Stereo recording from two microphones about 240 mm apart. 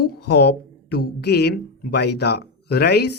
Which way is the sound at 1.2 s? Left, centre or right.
Left.